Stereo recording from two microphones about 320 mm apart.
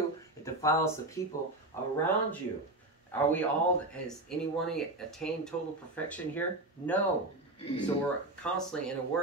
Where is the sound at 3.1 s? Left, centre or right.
Centre.